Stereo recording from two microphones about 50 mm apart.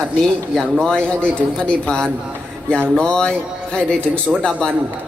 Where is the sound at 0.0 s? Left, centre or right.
Centre.